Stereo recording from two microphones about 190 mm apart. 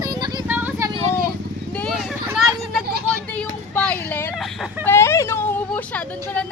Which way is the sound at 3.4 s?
5° left (ahead or behind).